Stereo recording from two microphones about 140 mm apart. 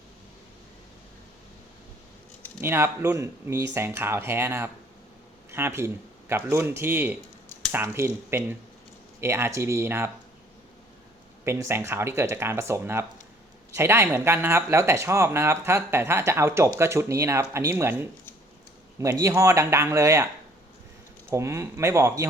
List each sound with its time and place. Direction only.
2.6 s speech: 15° right (ahead or behind)
11.4 s speech: 20° right (ahead or behind)
21.2 s speech: 20° right (ahead or behind)